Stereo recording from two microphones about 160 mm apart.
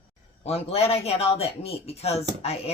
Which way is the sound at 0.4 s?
40° left (ahead or behind).